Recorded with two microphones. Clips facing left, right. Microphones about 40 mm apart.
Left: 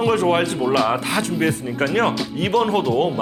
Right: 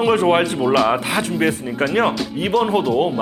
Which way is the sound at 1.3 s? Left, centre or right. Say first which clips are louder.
Right 2 dB; centre.